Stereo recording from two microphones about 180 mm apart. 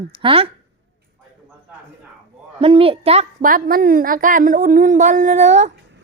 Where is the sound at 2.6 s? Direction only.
30° right (ahead or behind).